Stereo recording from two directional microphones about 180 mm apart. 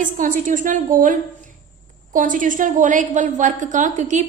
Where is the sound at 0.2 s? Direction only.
45° right (ahead or behind).